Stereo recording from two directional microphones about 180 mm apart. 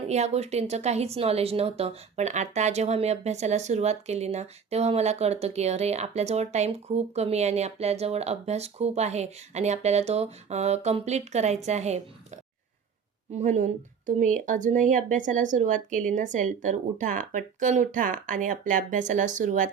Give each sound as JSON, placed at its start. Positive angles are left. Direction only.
{"t": 0.1, "sound": "speech", "side_deg": -35}
{"t": 13.3, "sound": "speech", "side_deg": -40}